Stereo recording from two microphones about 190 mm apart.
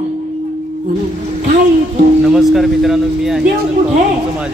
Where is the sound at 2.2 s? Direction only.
Centre (ahead or behind).